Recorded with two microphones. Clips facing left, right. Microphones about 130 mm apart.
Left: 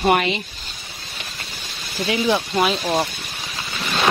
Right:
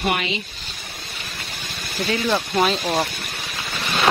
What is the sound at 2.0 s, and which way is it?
Speech, 20° left (ahead or behind).